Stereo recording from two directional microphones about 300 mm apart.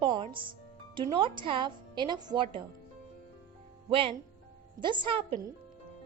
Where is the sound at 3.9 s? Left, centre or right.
Centre.